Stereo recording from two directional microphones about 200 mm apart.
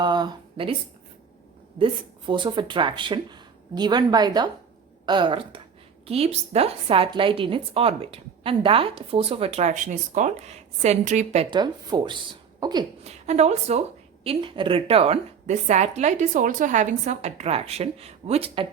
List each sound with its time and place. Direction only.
0.0 s a sound: 20° right (ahead or behind)
1.8 s a woman's voice: 25° right (ahead or behind)
11.5 s speech: 20° right (ahead or behind)
13.1 s a woman's voice: 35° right (ahead or behind)